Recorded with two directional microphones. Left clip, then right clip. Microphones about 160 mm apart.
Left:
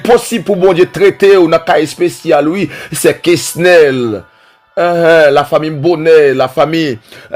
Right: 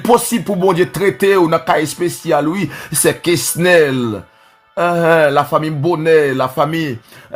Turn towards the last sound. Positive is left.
turn(degrees=30)  # may be behind; listen again after turning